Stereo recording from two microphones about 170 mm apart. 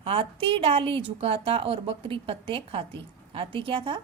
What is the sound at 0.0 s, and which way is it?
A woman's voice, 30° right (ahead or behind).